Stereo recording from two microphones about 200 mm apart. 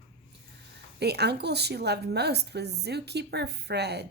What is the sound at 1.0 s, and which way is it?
A woman's voice, 55° right (ahead or behind).